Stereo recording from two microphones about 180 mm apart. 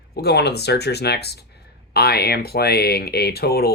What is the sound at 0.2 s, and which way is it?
Speech, 65° left (ahead or behind).